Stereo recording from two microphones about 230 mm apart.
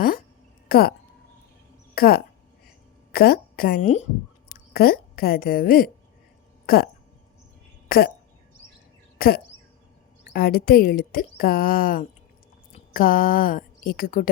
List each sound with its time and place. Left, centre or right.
0.7 s speech: left
2.0 s a woman's voice: left
2.6 s a sound: left
4.7 s a woman's voice: left
7.9 s speech: left
9.1 s a woman's voice: left